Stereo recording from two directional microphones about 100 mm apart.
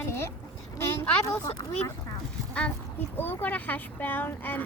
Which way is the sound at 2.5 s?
10° left (ahead or behind).